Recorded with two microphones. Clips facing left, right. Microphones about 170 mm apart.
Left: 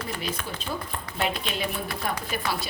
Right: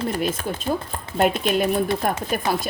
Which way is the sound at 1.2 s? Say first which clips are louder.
Right 10 dB; 45° right (ahead or behind).